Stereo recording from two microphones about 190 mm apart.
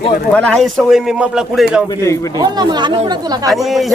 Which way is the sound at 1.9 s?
20° left (ahead or behind).